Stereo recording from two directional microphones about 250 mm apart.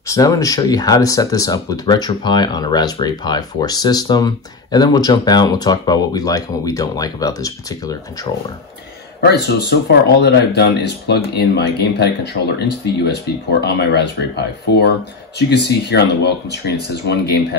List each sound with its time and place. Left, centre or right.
0.0 s speech: centre
9.2 s speech: left